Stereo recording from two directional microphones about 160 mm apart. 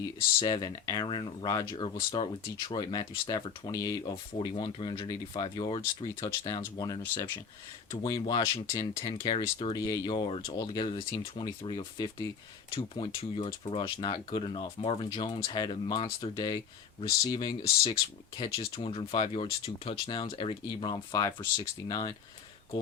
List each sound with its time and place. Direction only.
0.3 s speech: 25° left (ahead or behind)